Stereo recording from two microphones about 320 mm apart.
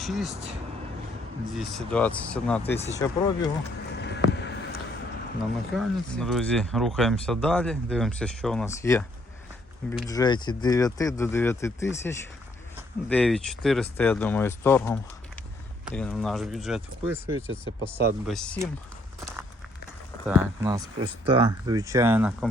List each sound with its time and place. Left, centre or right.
0.0 s speech: centre
1.5 s speech: centre
2.7 s speech: centre
3.9 s boat: left
5.7 s speech: centre
10.1 s speech: centre
16.0 s speech: centre
20.2 s speech: centre